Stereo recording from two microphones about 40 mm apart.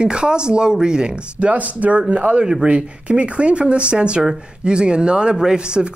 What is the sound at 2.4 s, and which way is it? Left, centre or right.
Speech, right.